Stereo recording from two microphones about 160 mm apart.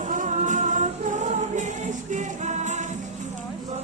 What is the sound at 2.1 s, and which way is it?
Music, 50° right (ahead or behind).